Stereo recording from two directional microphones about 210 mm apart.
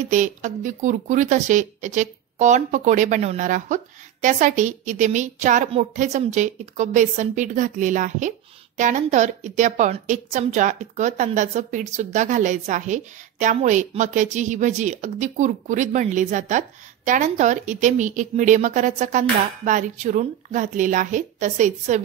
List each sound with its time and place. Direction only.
0.1 s a woman's voice: 35° right (ahead or behind)